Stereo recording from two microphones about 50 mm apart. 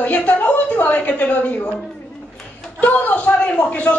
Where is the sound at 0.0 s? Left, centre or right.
Left.